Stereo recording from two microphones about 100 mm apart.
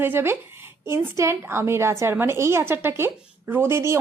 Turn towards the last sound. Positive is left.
turn(degrees=-25)  # may be behind; listen again after turning